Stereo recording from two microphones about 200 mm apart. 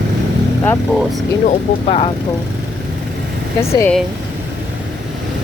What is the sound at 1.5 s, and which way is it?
Speech, 30° left (ahead or behind).